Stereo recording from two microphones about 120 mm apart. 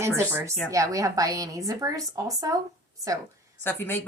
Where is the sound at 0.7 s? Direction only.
30° right (ahead or behind).